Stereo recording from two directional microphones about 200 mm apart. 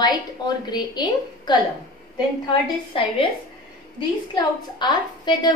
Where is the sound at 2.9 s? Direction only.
25° left (ahead or behind).